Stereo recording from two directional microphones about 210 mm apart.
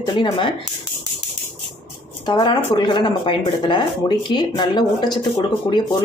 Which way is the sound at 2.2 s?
20° left (ahead or behind).